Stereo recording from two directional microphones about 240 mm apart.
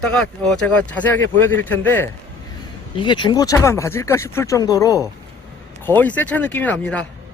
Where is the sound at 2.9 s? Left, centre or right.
Centre.